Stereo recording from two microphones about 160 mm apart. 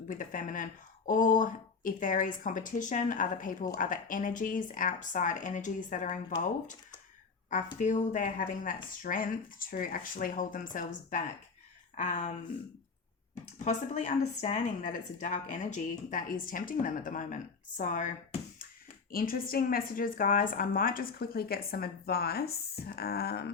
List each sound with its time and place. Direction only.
0.1 s speech: 55° left (ahead or behind)
7.5 s a woman's voice: 50° left (ahead or behind)
13.4 s a woman's voice: 50° left (ahead or behind)
19.1 s speech: 65° left (ahead or behind)
22.9 s a sound: 75° left (ahead or behind)